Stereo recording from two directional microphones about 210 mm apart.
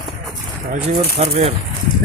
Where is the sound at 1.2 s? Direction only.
30° right (ahead or behind).